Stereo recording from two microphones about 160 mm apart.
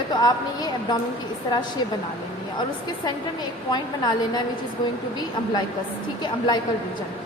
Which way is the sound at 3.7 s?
25° left (ahead or behind).